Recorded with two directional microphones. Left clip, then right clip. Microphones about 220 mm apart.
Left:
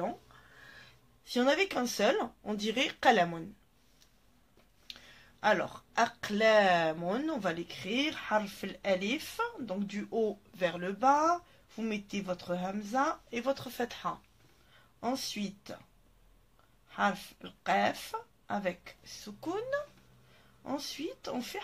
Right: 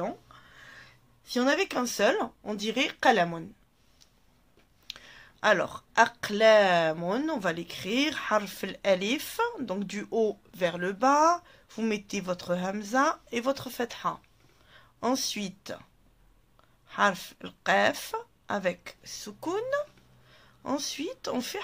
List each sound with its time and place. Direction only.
0.0 s speech: 30° right (ahead or behind)
4.8 s speech: 30° right (ahead or behind)
14.7 s speech: 40° right (ahead or behind)
16.8 s speech: 40° right (ahead or behind)